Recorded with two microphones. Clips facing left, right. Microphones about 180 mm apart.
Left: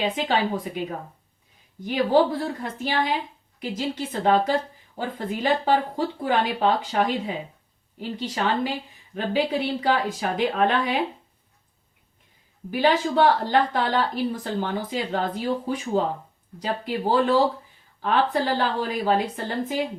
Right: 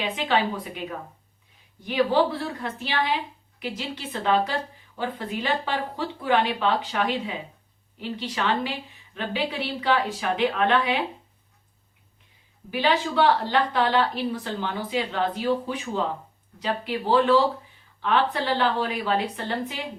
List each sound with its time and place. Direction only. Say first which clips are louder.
0.0 s speech: left 1 dB; 45° left (ahead or behind)
12.7 s speech: left 2 dB; 45° left (ahead or behind)